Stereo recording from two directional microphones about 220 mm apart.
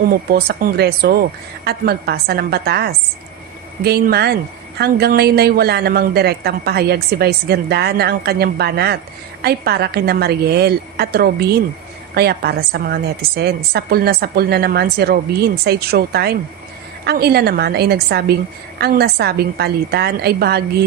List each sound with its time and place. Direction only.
0.1 s speech: 45° right (ahead or behind)